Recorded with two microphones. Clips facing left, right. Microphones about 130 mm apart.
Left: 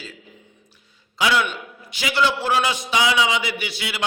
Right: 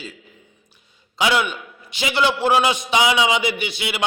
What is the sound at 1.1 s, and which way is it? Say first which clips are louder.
A man's voice: right 1 dB; 20° right (ahead or behind).